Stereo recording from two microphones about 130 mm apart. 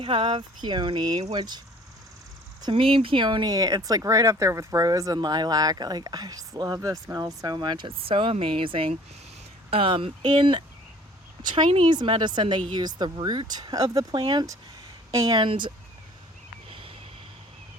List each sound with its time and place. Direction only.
0.0 s a woman's voice: 40° right (ahead or behind)
15.4 s speech: 40° right (ahead or behind)
16.6 s a sound: 45° right (ahead or behind)